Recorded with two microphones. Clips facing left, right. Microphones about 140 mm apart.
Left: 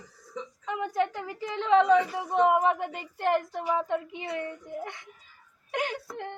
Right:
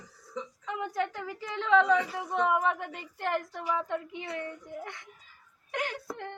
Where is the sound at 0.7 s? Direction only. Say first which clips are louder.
Left 4 dB; 20° left (ahead or behind).